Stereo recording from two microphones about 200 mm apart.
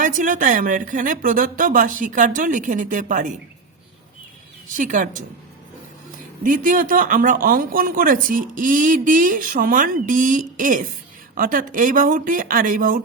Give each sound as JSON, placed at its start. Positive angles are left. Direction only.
{"t": 0.0, "sound": "a woman's voice", "side_deg": -40}
{"t": 4.7, "sound": "a woman's voice", "side_deg": -40}
{"t": 6.4, "sound": "speech", "side_deg": -45}